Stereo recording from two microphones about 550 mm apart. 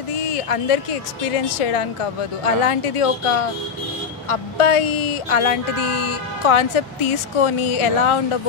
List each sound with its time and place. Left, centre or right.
0.3 s speech: left